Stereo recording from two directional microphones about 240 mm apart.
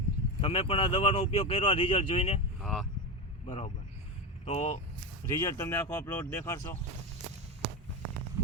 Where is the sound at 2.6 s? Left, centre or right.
Centre.